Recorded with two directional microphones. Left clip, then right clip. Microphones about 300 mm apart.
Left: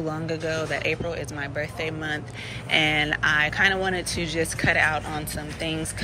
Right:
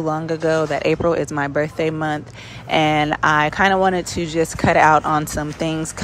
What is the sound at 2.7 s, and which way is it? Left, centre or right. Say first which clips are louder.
Speech: right 5 dB; centre.